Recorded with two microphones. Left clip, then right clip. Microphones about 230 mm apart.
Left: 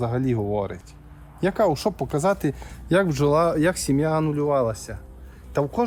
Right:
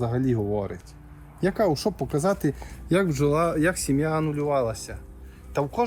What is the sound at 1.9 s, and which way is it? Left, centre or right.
Speech, centre.